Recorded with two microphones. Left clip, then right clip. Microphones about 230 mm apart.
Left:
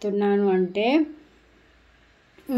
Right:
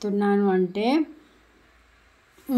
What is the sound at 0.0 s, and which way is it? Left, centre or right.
A woman's voice, right.